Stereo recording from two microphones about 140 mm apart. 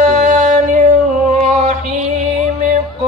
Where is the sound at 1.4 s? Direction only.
55° right (ahead or behind).